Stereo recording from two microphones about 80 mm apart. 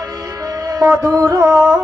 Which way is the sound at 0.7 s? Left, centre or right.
Right.